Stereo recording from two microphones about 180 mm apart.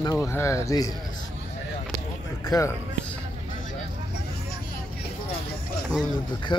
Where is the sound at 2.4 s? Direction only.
20° left (ahead or behind).